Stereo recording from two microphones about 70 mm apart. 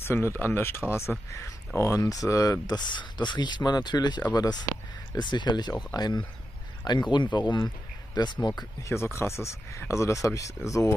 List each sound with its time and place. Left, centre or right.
0.0 s speech: left
1.8 s speech: left
4.3 s speech: left
5.1 s speech: left
8.8 s speech: left